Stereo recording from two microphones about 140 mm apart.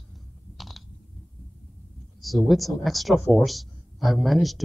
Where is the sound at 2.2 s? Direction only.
Centre (ahead or behind).